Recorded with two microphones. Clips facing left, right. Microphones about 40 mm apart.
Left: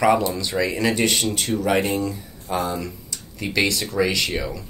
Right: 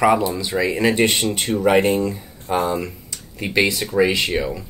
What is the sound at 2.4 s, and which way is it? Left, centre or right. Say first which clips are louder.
Speech: right 4 dB; right.